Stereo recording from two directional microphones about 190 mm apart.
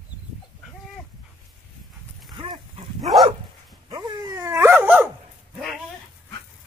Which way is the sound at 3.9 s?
15° right (ahead or behind).